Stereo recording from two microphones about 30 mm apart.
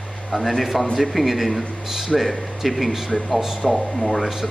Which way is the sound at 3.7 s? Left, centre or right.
Centre.